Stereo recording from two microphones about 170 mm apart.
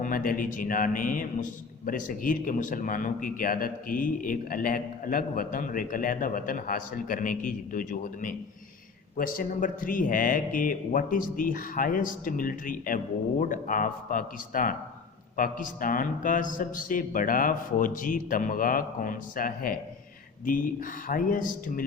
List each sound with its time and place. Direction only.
0.0 s a man's voice: 55° left (ahead or behind)